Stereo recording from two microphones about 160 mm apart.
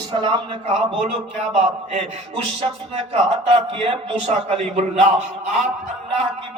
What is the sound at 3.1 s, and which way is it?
A man's voice, 35° right (ahead or behind).